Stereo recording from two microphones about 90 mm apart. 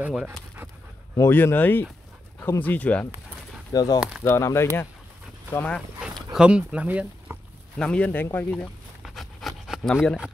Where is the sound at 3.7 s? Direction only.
45° left (ahead or behind).